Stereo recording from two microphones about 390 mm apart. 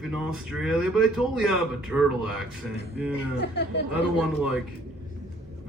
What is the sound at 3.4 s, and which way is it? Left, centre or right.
Speech, left.